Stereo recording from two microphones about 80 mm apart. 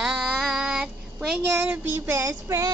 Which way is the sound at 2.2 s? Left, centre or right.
Right.